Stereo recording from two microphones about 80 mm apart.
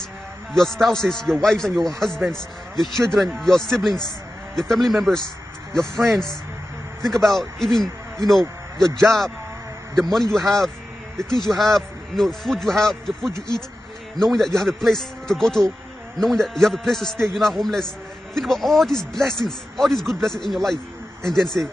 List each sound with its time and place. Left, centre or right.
0.5 s a man's voice: centre
9.9 s speech: centre